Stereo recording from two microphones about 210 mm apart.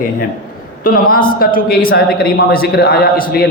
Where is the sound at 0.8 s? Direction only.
40° left (ahead or behind).